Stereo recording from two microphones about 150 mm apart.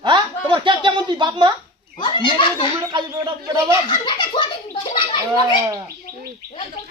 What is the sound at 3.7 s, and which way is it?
A child's voice, 30° left (ahead or behind).